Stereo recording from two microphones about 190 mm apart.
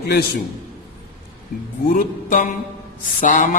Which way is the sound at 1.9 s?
45° left (ahead or behind).